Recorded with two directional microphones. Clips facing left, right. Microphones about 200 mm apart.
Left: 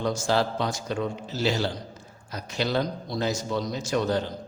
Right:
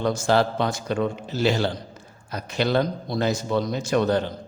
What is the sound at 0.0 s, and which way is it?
A man's voice, 60° right (ahead or behind).